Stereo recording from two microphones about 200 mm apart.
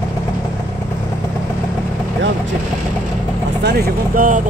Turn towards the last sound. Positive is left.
turn(degrees=-40)  # may be behind; listen again after turning